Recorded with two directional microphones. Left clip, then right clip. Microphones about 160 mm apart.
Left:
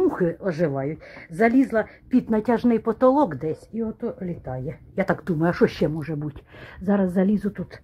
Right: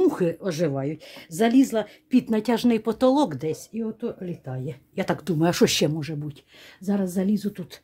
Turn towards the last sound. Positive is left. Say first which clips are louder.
# left 4 dB
turn(degrees=0)  # may be behind; listen again after turning